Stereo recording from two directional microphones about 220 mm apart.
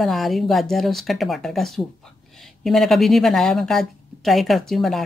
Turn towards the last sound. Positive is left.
turn(degrees=0)  # may be behind; listen again after turning